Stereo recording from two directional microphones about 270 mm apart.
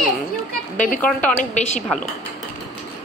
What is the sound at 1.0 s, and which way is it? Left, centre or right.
Speech, centre.